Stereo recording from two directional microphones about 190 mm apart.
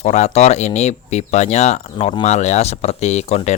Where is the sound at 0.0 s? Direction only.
35° left (ahead or behind).